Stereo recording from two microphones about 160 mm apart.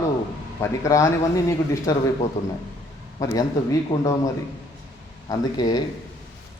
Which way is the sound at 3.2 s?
20° left (ahead or behind).